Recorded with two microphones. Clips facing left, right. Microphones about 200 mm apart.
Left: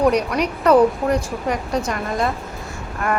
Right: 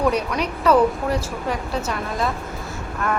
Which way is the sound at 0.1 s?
10° left (ahead or behind).